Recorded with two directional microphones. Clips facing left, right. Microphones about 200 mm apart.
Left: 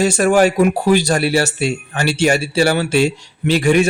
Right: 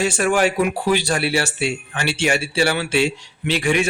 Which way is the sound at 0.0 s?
40° left (ahead or behind).